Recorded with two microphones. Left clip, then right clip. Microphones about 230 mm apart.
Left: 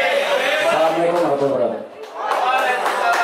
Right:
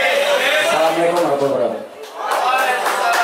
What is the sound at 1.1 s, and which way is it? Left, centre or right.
Speech, left.